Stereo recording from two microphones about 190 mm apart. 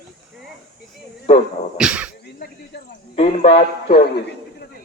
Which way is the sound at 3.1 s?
30° left (ahead or behind).